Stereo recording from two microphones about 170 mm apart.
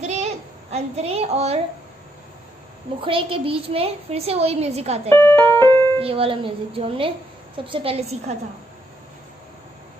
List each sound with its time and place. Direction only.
0.0 s child singing: 40° right (ahead or behind)
3.0 s a woman's voice: 30° right (ahead or behind)
5.1 s keyboard: 10° left (ahead or behind)
5.9 s a woman's voice: 35° right (ahead or behind)